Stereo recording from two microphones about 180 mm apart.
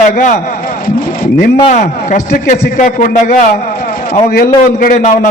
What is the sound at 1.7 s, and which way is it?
A man's voice, 45° left (ahead or behind).